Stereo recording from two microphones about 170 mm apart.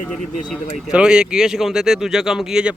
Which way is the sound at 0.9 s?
5° right (ahead or behind).